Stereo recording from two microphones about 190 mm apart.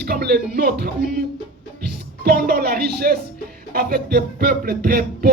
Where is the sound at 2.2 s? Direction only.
55° right (ahead or behind).